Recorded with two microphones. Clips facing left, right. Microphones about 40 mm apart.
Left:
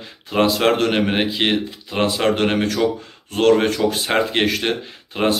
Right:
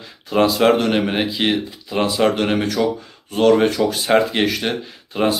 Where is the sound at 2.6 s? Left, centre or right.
Left.